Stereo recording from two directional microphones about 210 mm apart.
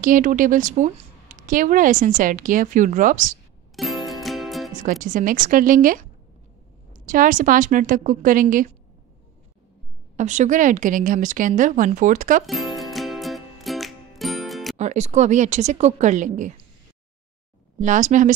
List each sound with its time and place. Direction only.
0.0 s speech: 40° right (ahead or behind)
3.7 s music: centre (ahead or behind)
4.7 s speech: 40° right (ahead or behind)
10.1 s speech: 35° right (ahead or behind)
12.4 s music: centre (ahead or behind)
14.8 s speech: 30° right (ahead or behind)
17.7 s speech: 35° right (ahead or behind)